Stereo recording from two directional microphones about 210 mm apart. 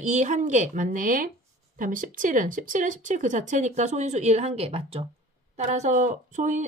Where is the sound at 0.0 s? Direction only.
35° right (ahead or behind).